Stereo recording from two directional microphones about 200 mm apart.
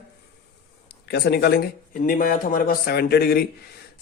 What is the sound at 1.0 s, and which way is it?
Speech, 55° left (ahead or behind).